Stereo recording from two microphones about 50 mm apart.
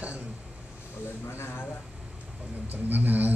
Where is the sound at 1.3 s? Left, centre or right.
Left.